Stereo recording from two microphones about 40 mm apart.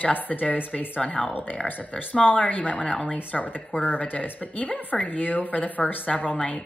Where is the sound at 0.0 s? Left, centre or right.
Left.